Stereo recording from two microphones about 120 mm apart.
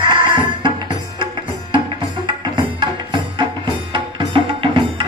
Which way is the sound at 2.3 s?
40° right (ahead or behind).